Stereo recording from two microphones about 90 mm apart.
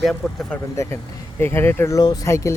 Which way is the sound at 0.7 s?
35° left (ahead or behind).